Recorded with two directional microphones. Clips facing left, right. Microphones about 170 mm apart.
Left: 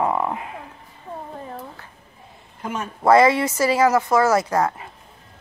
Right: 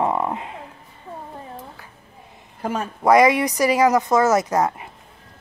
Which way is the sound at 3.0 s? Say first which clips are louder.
Even; 15° right (ahead or behind).